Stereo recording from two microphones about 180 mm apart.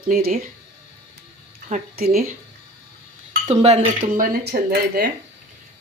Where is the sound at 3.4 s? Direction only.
35° right (ahead or behind).